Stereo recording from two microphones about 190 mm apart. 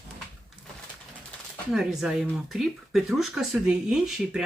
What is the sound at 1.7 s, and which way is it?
Speech, 5° right (ahead or behind).